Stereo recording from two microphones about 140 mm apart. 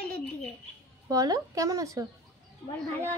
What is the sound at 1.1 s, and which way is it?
Speech, 25° right (ahead or behind).